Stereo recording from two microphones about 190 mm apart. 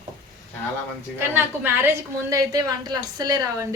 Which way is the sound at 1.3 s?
10° right (ahead or behind).